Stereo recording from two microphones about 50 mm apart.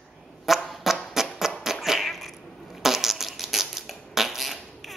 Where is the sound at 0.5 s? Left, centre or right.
Centre.